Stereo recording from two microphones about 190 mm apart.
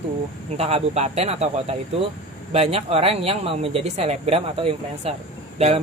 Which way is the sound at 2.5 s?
30° right (ahead or behind).